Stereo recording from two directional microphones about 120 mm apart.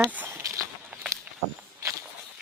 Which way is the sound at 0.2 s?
20° right (ahead or behind).